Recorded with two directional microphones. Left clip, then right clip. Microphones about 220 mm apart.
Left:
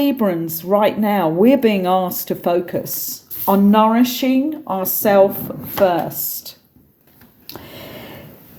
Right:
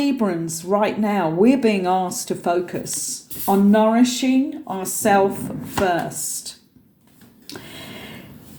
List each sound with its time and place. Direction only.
0.0 s speech: 45° left (ahead or behind)